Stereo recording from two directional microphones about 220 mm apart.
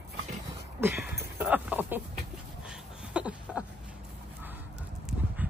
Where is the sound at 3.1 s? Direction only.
5° right (ahead or behind).